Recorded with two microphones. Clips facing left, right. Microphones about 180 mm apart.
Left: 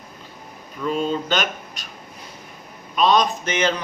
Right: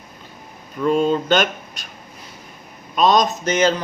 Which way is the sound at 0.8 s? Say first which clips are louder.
Right 5 dB; 45° right (ahead or behind).